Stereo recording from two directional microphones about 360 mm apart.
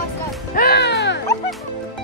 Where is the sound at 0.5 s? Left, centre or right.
Left.